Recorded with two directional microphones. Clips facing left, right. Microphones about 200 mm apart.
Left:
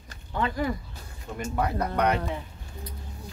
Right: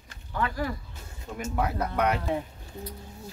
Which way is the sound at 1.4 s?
5° right (ahead or behind).